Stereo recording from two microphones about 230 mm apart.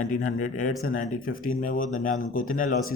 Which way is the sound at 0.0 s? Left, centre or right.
Left.